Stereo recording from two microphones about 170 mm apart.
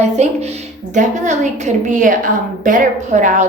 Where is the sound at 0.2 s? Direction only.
40° right (ahead or behind).